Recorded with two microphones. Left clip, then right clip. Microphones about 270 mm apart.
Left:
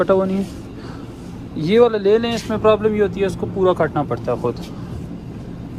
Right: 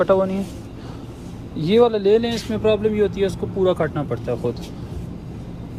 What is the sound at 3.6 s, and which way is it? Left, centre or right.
Speech, left.